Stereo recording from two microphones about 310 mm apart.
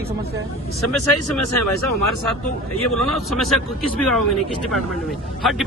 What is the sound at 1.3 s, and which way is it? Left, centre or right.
Speech, left.